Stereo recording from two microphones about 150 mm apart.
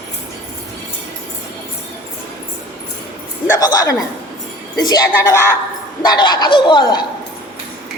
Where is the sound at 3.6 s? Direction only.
25° left (ahead or behind).